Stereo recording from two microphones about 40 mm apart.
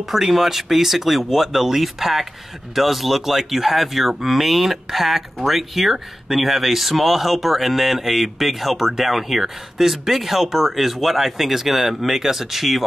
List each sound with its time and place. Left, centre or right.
0.1 s speech: centre